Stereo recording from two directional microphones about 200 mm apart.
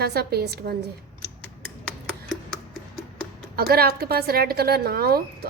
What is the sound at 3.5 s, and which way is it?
A woman's voice, 50° right (ahead or behind).